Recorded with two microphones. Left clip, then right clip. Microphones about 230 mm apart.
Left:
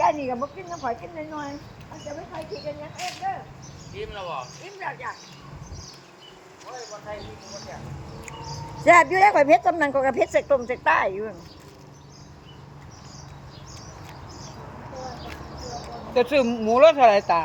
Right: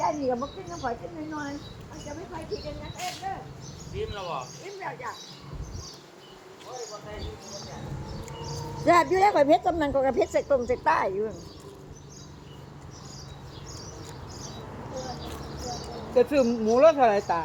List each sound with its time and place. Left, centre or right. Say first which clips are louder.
0.0 s speech: left 4 dB; left
3.9 s speech: left 1 dB; centre
8.8 s speech: left 5 dB; centre
16.1 s speech: left 2 dB; left